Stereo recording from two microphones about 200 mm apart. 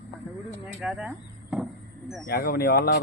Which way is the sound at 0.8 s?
5° right (ahead or behind).